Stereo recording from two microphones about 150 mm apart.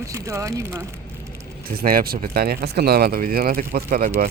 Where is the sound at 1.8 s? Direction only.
80° right.